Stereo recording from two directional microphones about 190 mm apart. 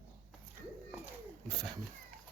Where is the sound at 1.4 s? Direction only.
5° left (ahead or behind).